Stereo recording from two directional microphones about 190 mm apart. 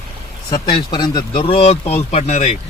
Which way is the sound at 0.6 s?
25° left (ahead or behind).